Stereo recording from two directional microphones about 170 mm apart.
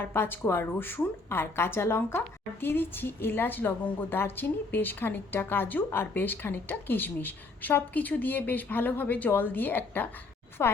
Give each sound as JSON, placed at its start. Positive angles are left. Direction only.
{"t": 0.0, "sound": "speech", "side_deg": 15}